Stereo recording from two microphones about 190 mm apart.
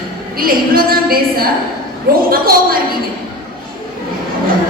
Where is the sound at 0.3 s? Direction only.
50° right (ahead or behind).